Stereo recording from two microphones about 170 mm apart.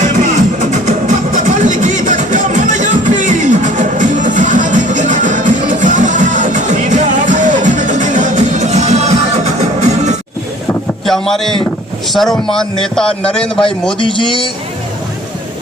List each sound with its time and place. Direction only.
0.0 s music: 45° right (ahead or behind)
11.0 s speech: centre (ahead or behind)
14.0 s a man's voice: 30° left (ahead or behind)